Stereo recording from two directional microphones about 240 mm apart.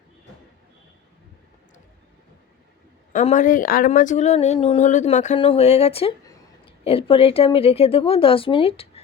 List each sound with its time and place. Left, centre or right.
3.1 s speech: left